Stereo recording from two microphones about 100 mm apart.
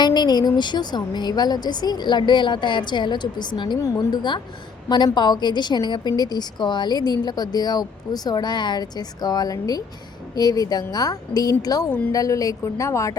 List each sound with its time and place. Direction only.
0.0 s a woman's voice: 45° left (ahead or behind)